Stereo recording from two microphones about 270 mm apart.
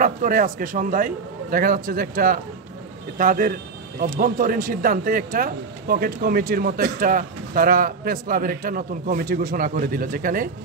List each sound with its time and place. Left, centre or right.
0.0 s speech: right